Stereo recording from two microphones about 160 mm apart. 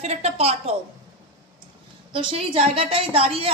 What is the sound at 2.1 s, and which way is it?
A man's voice, 35° right (ahead or behind).